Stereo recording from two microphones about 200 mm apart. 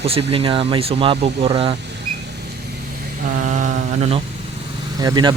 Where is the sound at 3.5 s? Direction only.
40° right (ahead or behind).